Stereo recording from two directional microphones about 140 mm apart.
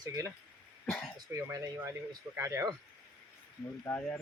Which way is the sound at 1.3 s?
20° right (ahead or behind).